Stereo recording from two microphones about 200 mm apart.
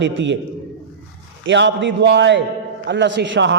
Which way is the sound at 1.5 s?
65° right (ahead or behind).